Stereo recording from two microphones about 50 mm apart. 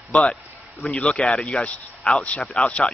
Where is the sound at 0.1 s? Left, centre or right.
Centre.